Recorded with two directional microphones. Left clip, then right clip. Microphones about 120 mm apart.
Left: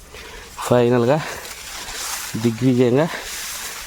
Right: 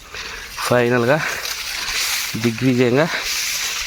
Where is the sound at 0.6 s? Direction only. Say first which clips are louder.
Even; 45° left (ahead or behind).